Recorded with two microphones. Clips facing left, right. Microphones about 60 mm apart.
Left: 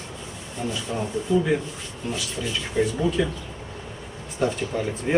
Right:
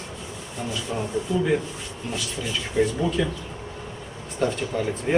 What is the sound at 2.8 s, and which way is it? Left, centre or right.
Speech, centre.